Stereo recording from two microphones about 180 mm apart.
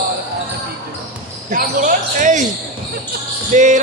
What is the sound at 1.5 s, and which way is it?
Speech, 45° right (ahead or behind).